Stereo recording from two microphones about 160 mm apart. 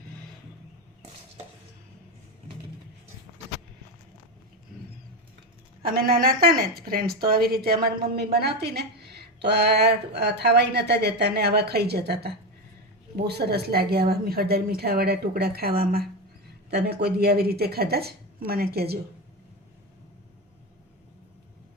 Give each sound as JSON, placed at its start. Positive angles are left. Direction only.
{"t": 5.9, "sound": "a woman's voice", "side_deg": -70}
{"t": 16.7, "sound": "a woman's voice", "side_deg": -85}